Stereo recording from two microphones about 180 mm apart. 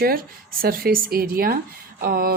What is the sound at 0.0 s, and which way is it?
Speech, 55° right (ahead or behind).